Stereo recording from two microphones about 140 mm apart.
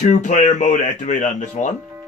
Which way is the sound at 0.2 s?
60° left (ahead or behind).